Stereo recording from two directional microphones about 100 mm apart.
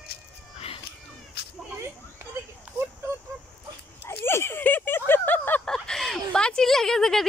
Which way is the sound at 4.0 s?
25° left (ahead or behind).